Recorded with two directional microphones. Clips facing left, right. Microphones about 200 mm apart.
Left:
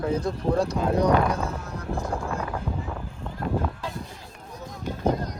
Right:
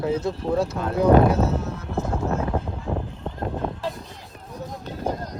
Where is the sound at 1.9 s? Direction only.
25° right (ahead or behind).